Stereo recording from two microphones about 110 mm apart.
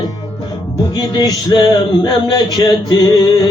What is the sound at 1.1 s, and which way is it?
Speech, 40° left (ahead or behind).